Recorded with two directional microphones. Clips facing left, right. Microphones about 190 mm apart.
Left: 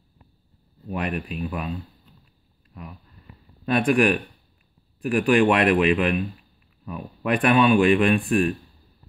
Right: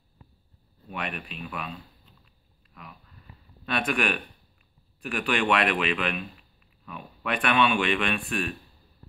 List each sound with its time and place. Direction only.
0.8 s speech: 35° left (ahead or behind)
3.6 s speech: 35° left (ahead or behind)